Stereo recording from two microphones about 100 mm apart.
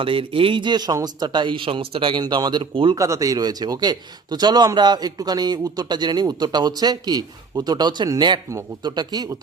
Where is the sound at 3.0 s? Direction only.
35° right (ahead or behind).